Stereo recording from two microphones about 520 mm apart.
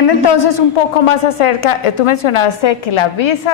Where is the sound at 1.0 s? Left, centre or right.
Left.